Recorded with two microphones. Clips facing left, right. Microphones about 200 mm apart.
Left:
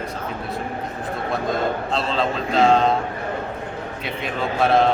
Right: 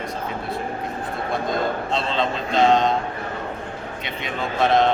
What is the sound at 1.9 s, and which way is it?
A man's voice, 5° left (ahead or behind).